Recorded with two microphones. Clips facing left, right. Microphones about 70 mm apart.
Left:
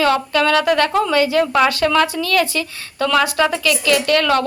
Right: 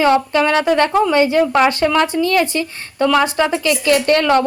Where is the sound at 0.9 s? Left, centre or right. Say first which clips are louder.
Right 3 dB; centre.